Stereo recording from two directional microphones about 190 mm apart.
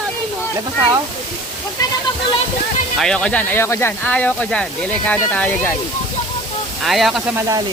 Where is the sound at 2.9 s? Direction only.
5° left (ahead or behind).